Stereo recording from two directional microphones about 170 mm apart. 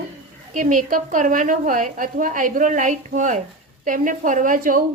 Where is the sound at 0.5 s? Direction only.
50° right (ahead or behind).